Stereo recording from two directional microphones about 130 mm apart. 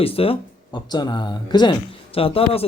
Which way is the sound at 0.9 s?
35° left (ahead or behind).